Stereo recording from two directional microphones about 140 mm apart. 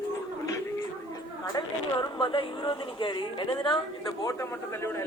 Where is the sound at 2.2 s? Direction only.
35° left (ahead or behind).